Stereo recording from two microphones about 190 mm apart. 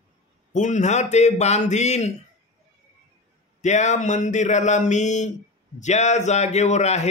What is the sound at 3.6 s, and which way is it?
A man's voice, 40° left (ahead or behind).